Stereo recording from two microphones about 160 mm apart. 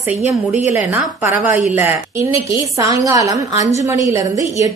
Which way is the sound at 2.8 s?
20° right (ahead or behind).